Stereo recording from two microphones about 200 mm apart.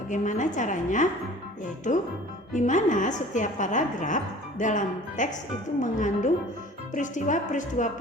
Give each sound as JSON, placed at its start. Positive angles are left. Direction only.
{"t": 0.1, "sound": "a woman's voice", "side_deg": 40}
{"t": 2.5, "sound": "a woman's voice", "side_deg": 40}